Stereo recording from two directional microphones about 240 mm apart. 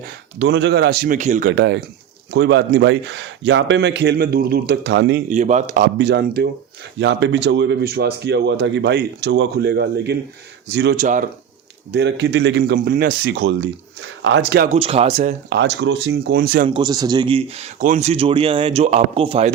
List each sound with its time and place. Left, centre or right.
0.3 s speech: right
5.3 s speech: right
11.9 s speech: right
14.7 s speech: right
15.5 s speech: right
16.6 s speech: centre